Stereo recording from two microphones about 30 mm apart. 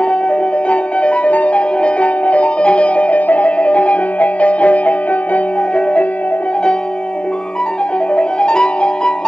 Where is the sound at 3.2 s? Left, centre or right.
Left.